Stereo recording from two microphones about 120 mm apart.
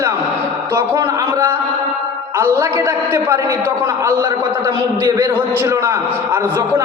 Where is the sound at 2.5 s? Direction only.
20° right (ahead or behind).